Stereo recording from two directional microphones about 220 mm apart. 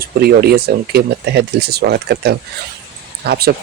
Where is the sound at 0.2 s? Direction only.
45° right (ahead or behind).